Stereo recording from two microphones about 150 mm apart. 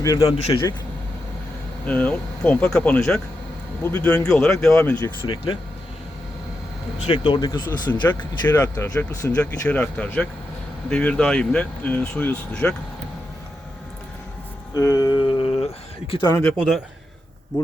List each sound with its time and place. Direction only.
0.0 s a man's voice: 25° left (ahead or behind)
1.9 s speech: 10° left (ahead or behind)
4.8 s speech: 15° left (ahead or behind)
5.2 s speech: 35° left (ahead or behind)
7.0 s speech: 35° left (ahead or behind)
8.0 s speech: 15° left (ahead or behind)
14.7 s speech: 20° left (ahead or behind)
16.6 s speech: centre (ahead or behind)
17.5 s a man's voice: 30° left (ahead or behind)